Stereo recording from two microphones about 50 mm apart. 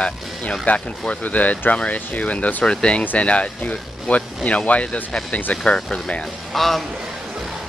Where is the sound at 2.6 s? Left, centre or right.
Left.